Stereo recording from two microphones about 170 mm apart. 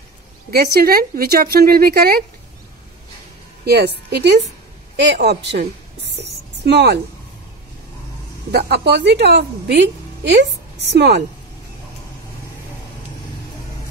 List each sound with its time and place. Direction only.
0.5 s speech: 70° right (ahead or behind)
3.6 s a woman's voice: 70° right (ahead or behind)
8.5 s a woman's voice: 70° right (ahead or behind)